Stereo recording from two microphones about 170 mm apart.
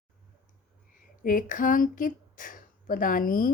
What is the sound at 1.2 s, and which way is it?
Speech, 50° left (ahead or behind).